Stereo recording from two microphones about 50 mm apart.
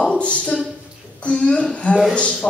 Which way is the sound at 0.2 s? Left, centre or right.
Left.